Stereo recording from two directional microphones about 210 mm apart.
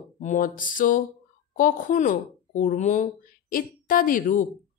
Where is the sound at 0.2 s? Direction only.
35° left (ahead or behind).